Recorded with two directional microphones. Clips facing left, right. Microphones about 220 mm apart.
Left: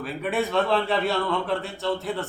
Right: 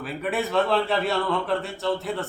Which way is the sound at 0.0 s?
Centre (ahead or behind).